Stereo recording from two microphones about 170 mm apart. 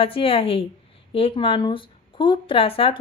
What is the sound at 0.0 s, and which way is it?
Speech, 30° left (ahead or behind).